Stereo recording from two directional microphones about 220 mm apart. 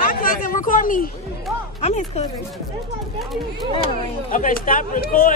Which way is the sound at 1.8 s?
30° left (ahead or behind).